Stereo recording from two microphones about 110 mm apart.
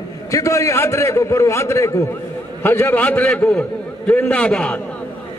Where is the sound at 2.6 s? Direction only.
20° left (ahead or behind).